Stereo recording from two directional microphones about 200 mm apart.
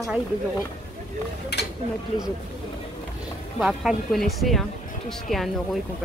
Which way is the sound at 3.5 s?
Centre (ahead or behind).